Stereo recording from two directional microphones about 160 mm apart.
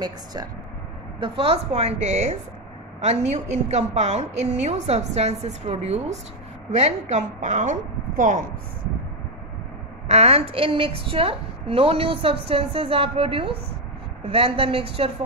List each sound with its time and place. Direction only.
0.0 s a woman's voice: 25° right (ahead or behind); by 8.5 s 55° right (ahead or behind)
10.0 s a woman's voice: 40° right (ahead or behind)